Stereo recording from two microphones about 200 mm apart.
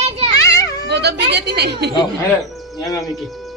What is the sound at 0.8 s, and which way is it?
A woman's voice, 55° right (ahead or behind).